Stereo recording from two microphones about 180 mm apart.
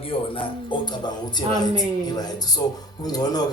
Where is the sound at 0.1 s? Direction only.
30° left (ahead or behind).